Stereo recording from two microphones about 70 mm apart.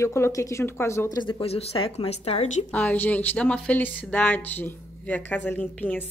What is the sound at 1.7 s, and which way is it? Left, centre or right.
Speech, left.